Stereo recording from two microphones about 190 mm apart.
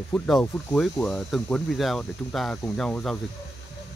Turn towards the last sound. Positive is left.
turn(degrees=5)  # may be behind; listen again after turning